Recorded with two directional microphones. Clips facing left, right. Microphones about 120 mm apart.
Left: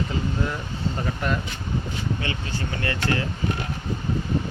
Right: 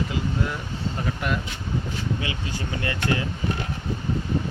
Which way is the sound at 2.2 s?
15° right (ahead or behind).